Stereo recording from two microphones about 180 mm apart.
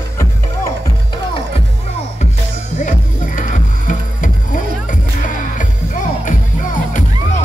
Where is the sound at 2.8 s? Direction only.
45° left (ahead or behind).